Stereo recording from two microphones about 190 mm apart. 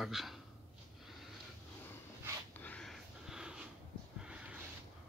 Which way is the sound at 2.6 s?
5° left (ahead or behind).